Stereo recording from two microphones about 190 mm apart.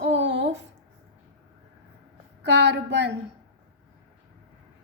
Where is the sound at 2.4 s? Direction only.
65° right (ahead or behind).